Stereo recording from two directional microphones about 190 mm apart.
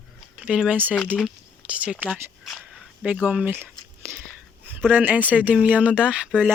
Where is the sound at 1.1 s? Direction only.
5° right (ahead or behind).